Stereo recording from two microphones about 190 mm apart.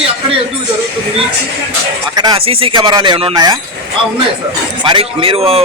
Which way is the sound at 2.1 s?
25° right (ahead or behind).